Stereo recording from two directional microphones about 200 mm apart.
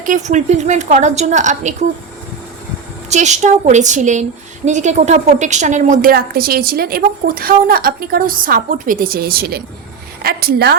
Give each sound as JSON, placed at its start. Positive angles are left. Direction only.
{"t": 0.0, "sound": "a woman's voice", "side_deg": -40}
{"t": 3.1, "sound": "a woman's voice", "side_deg": -35}